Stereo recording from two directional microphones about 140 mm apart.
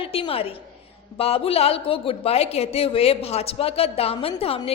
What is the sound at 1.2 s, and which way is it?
A woman's voice, 45° left (ahead or behind).